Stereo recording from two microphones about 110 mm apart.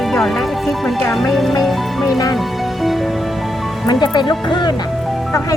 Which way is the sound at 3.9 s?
45° left (ahead or behind).